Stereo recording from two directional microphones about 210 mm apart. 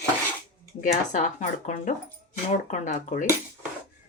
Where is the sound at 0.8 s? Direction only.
35° left (ahead or behind).